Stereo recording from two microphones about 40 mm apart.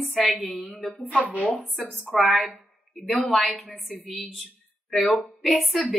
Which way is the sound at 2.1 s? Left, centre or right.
Centre.